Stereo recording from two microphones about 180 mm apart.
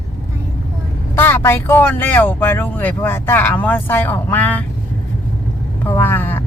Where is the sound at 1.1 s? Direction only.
15° left (ahead or behind).